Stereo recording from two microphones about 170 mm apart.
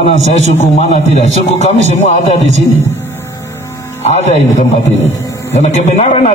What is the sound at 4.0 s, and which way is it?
Speech, 40° left (ahead or behind).